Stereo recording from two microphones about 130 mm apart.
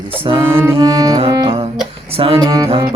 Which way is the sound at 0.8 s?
30° right (ahead or behind).